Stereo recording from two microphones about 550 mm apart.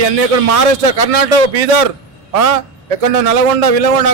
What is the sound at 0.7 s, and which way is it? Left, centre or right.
A man's voice, right.